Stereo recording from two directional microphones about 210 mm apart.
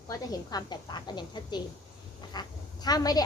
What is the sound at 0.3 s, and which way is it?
A woman's voice, 20° left (ahead or behind).